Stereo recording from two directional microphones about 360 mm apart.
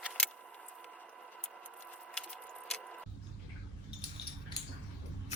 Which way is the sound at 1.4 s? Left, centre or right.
Centre.